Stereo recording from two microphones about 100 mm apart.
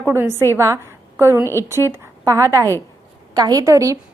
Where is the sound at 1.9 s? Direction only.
30° right (ahead or behind).